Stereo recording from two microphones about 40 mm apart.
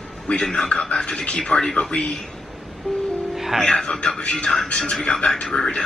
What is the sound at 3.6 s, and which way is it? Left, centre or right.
Speech, centre.